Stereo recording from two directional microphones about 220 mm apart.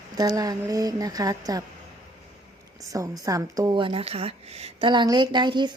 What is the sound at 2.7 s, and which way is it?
Speech, 15° right (ahead or behind).